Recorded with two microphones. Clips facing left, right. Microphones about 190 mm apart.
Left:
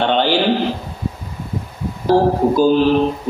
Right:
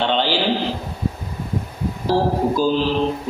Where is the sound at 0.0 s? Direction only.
55° left (ahead or behind).